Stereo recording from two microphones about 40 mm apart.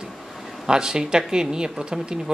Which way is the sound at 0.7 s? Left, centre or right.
Centre.